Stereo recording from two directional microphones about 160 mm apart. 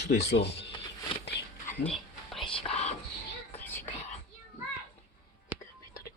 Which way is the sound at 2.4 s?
40° left (ahead or behind).